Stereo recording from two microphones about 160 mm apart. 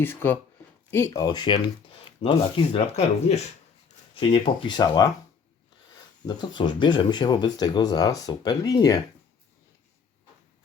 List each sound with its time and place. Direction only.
0.0 s speech: 15° left (ahead or behind); by 3.4 s 45° left (ahead or behind)
4.1 s speech: 30° left (ahead or behind)
6.2 s speech: 30° left (ahead or behind)